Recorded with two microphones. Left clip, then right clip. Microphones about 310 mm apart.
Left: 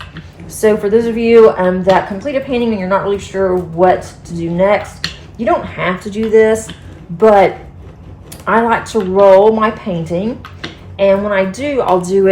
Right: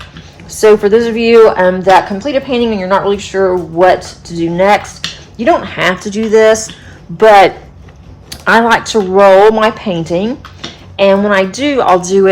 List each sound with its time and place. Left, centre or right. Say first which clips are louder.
0.5 s a woman's voice: right 4 dB; right